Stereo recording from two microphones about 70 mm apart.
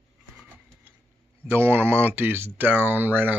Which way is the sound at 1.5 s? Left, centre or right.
Right.